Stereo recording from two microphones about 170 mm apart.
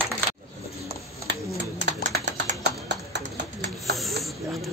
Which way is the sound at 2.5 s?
45° right (ahead or behind).